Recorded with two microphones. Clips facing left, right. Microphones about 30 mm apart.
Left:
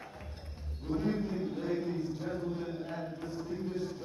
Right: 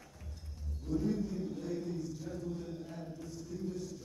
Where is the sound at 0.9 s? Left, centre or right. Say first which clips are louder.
Left 2 dB; left.